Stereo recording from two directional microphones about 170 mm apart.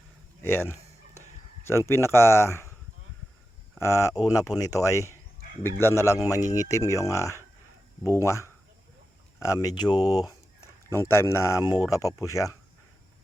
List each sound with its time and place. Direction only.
0.4 s a sound: 15° left (ahead or behind)
1.6 s speech: 15° left (ahead or behind)
3.8 s speech: 15° left (ahead or behind)